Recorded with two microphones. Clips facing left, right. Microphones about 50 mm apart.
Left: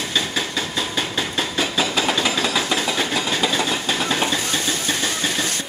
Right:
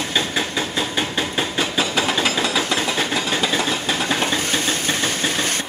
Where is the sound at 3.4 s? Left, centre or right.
Right.